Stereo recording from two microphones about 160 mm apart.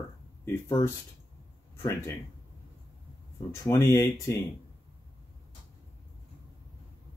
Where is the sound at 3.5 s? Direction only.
20° left (ahead or behind).